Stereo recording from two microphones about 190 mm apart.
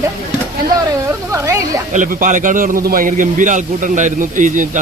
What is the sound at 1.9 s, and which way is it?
A man's voice, 45° right (ahead or behind).